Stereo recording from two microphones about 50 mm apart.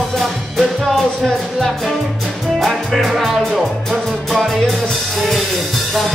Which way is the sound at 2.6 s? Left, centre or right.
Centre.